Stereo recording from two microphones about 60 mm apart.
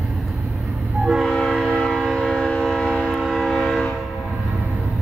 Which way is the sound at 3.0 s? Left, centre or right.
Centre.